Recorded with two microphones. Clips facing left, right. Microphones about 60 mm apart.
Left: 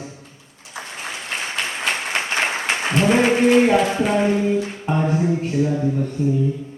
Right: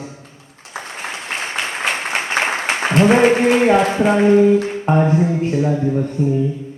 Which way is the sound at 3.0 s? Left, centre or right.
Right.